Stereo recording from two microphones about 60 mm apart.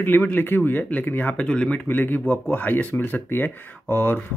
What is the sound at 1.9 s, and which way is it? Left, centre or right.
Speech, left.